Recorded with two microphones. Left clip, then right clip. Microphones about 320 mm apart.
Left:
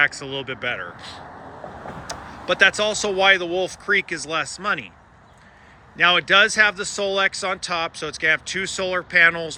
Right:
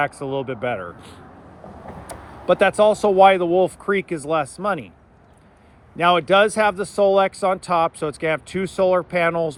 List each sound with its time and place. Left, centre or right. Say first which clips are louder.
0.0 s speech: left 2 dB; centre
2.5 s speech: right 2 dB; centre
6.0 s speech: even; centre